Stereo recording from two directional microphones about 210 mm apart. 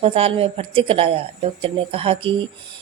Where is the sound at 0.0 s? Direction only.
25° right (ahead or behind).